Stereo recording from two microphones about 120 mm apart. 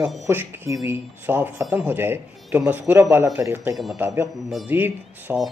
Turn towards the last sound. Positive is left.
turn(degrees=-10)  # may be behind; listen again after turning